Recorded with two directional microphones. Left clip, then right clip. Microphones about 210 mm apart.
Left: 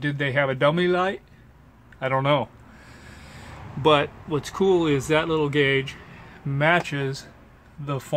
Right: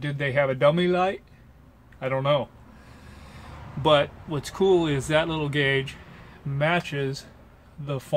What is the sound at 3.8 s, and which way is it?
A man's voice, 5° left (ahead or behind).